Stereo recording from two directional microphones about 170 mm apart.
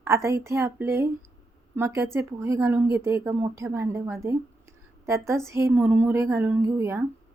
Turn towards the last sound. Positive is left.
turn(degrees=-15)  # may be behind; listen again after turning